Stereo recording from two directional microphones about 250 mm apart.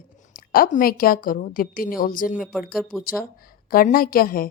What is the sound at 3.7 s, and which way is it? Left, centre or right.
Speech, left.